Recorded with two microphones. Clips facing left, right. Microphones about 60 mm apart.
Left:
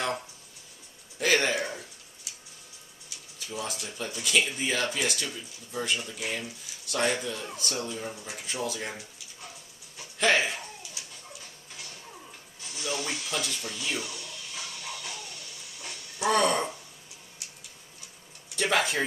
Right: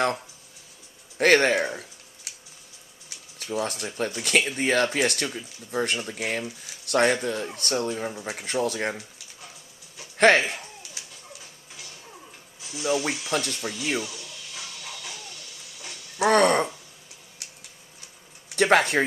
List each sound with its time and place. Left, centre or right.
1.1 s speech: right
3.4 s speech: right
10.1 s speech: right
11.7 s a sound: centre
13.3 s speech: right
13.9 s television: centre
16.2 s speech: right
18.6 s a sound: right